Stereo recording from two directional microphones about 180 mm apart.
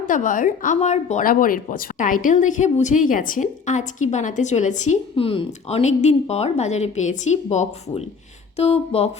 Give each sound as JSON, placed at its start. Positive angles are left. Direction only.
{"t": 0.0, "sound": "speech", "side_deg": 45}